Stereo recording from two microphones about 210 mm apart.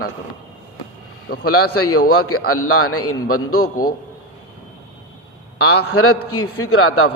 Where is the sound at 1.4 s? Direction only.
90° left.